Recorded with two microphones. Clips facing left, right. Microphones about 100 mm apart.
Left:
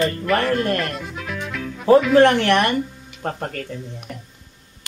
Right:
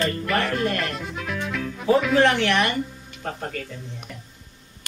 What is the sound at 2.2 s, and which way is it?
Speech, 50° left (ahead or behind).